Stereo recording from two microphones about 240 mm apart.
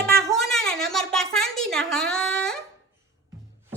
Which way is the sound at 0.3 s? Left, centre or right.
Centre.